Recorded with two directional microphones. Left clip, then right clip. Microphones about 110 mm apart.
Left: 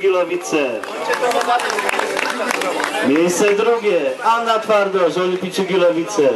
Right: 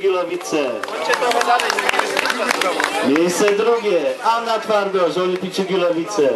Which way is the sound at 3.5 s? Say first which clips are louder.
Left 1 dB; centre (ahead or behind).